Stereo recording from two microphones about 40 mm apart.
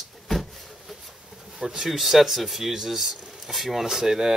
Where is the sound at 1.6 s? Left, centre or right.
Centre.